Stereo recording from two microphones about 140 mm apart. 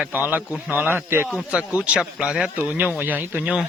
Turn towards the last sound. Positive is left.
turn(degrees=-10)  # may be behind; listen again after turning